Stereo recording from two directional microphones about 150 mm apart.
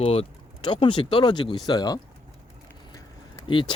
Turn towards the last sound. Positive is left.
turn(degrees=35)  # may be behind; listen again after turning